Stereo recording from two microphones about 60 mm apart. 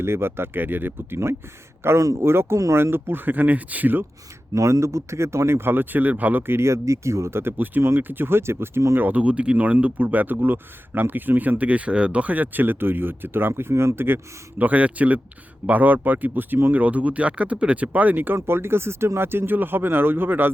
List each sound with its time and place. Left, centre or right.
0.0 s speech: right
2.0 s speech: right
2.2 s speech: right
4.5 s speech: right
6.4 s speech: right
9.0 s speech: right
14.6 s speech: right
18.3 s speech: right